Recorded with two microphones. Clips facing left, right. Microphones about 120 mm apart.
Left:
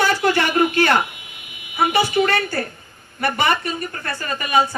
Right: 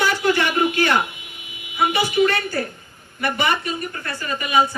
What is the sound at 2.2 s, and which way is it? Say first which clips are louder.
Speech: right 1 dB; 45° left (ahead or behind).